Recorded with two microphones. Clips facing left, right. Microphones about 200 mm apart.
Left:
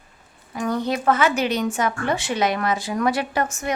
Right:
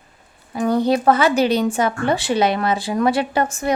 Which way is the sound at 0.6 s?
30° right (ahead or behind).